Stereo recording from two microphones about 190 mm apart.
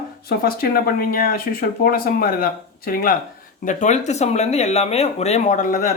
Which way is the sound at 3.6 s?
40° left (ahead or behind).